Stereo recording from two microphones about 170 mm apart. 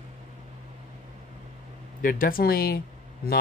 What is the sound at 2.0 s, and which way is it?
Speech, 55° left (ahead or behind).